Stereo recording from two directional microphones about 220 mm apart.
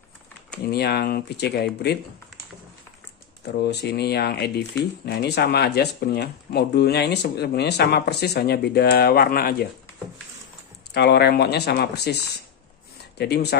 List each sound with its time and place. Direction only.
0.7 s speech: 45° left (ahead or behind)
3.6 s speech: 45° left (ahead or behind)
10.9 s speech: 50° left (ahead or behind)
13.2 s speech: 50° left (ahead or behind)